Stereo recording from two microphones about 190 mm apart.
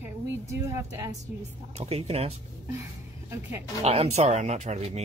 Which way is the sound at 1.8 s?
35° right (ahead or behind).